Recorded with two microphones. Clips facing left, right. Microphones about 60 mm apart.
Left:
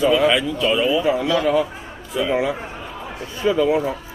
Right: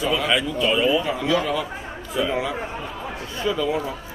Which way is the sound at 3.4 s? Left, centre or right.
Left.